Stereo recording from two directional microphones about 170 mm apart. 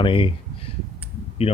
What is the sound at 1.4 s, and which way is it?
Speech, 35° left (ahead or behind).